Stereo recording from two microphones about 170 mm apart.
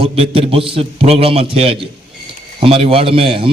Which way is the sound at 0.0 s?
35° right (ahead or behind).